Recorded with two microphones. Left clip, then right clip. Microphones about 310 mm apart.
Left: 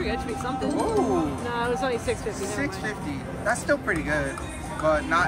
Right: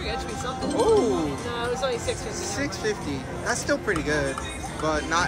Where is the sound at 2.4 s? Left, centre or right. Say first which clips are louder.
Right 1 dB; centre.